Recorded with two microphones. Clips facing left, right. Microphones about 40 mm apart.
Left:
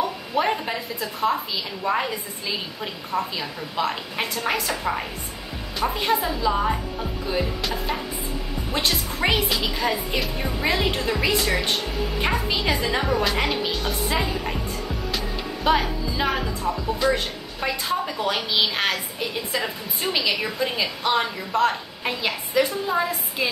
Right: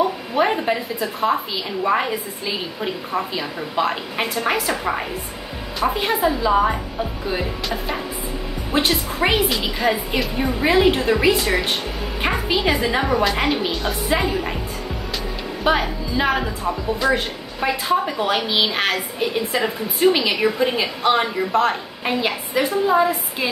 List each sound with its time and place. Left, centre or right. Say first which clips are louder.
0.4 s a woman's voice: right 4 dB; centre
7.6 s music: right 2 dB; centre
8.7 s a woman's voice: right 6 dB; centre
15.6 s a woman's voice: right 2 dB; centre